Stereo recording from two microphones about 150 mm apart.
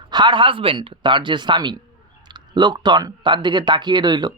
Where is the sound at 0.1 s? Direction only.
30° right (ahead or behind).